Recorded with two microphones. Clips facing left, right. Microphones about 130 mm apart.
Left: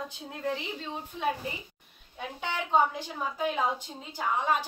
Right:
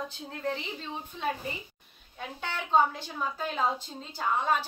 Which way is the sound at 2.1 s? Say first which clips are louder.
Left 2 dB; 15° left (ahead or behind).